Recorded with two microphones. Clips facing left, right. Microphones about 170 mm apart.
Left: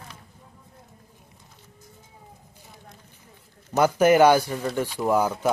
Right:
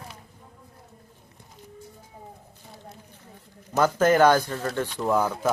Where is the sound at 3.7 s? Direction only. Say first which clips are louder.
Left 2 dB; 10° left (ahead or behind).